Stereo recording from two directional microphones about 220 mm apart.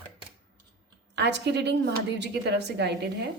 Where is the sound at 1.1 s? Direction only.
50° right (ahead or behind).